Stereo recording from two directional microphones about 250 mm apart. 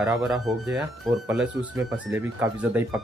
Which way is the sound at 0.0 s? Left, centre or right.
Centre.